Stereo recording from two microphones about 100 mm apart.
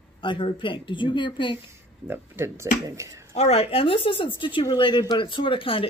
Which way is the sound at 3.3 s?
90° left.